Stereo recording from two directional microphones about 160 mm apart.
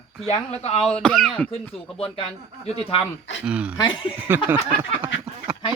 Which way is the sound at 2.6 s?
40° left (ahead or behind).